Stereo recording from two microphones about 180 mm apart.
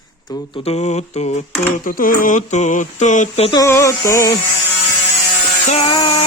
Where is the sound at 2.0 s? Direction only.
50° left (ahead or behind).